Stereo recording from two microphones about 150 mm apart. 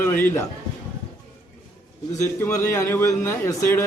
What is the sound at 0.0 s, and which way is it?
Speech, 15° left (ahead or behind).